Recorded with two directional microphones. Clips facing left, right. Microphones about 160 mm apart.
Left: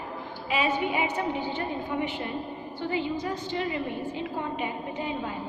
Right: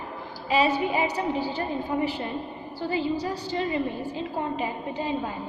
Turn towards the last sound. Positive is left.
turn(degrees=-35)  # may be behind; listen again after turning